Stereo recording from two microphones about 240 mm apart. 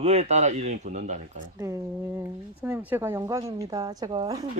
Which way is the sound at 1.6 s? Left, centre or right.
Centre.